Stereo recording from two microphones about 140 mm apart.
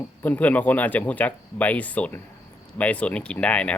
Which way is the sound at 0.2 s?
10° left (ahead or behind).